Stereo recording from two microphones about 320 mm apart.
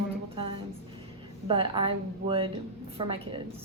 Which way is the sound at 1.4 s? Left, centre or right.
Centre.